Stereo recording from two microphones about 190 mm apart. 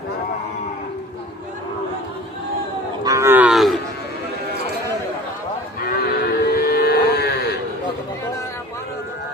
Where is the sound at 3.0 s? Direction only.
15° right (ahead or behind); by 3.8 s centre (ahead or behind).